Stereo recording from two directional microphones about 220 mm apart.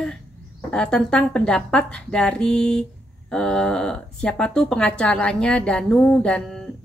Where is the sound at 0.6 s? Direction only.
5° left (ahead or behind).